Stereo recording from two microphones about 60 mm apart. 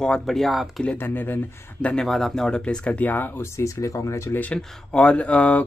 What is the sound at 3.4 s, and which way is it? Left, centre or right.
Speech, left.